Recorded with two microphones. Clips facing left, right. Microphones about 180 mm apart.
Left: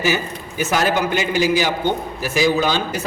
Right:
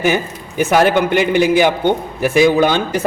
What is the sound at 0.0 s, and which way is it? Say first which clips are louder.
A man's voice: right 4 dB; 55° right (ahead or behind).